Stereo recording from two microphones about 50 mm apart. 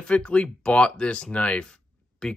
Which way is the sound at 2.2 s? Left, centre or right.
Centre.